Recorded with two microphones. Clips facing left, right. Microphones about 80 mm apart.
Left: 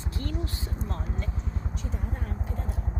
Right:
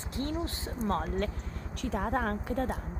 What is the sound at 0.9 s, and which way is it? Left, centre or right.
Speech, right.